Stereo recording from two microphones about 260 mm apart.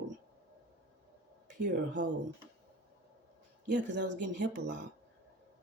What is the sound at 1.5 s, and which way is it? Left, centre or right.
Speech, right.